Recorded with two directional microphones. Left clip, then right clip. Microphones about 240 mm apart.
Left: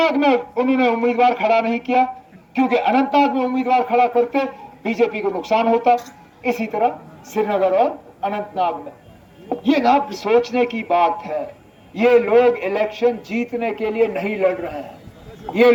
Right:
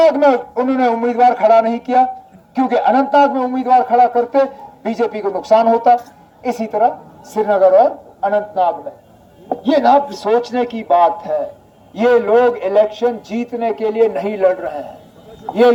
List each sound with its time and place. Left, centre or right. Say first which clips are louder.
0.0 s a man's voice: right 5 dB; right
2.6 s a man's voice: right 4 dB; right